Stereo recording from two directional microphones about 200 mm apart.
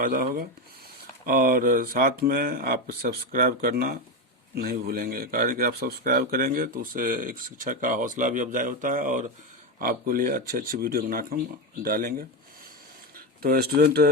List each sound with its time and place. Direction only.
0.0 s speech: 45° right (ahead or behind)
13.4 s speech: 50° right (ahead or behind)